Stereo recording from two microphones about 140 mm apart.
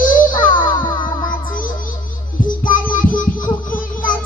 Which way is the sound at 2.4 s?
75° left (ahead or behind).